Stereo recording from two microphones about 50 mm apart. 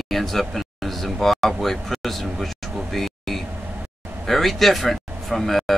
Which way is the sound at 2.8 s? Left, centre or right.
Centre.